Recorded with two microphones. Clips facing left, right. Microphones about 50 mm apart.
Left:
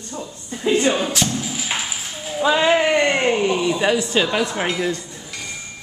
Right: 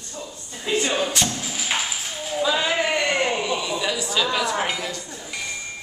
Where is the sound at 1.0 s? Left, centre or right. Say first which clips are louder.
Left 3 dB; centre.